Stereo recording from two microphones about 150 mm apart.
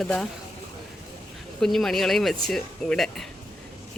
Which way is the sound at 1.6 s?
Centre (ahead or behind).